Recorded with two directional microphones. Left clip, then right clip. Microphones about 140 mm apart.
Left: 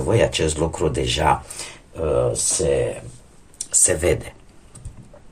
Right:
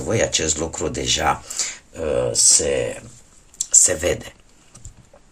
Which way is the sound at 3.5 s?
15° right (ahead or behind).